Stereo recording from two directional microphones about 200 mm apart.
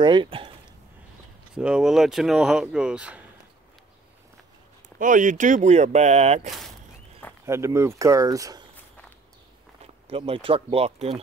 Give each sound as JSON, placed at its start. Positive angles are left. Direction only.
{"t": 0.0, "sound": "speech", "side_deg": -25}
{"t": 1.5, "sound": "speech", "side_deg": -5}
{"t": 4.8, "sound": "speech", "side_deg": -40}
{"t": 7.4, "sound": "speech", "side_deg": -15}
{"t": 9.8, "sound": "speech", "side_deg": -30}